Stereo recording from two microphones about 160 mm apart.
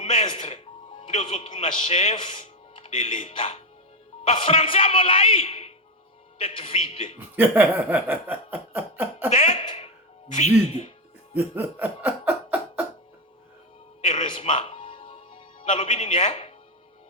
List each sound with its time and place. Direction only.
0.0 s a man's voice: 45° left (ahead or behind)
7.3 s a sound: 10° right (ahead or behind)
9.3 s throat clearing: 40° left (ahead or behind)
10.2 s speech: 45° left (ahead or behind)
11.3 s speech: 10° right (ahead or behind)
14.0 s music: 50° left (ahead or behind)
14.6 s music: 35° left (ahead or behind)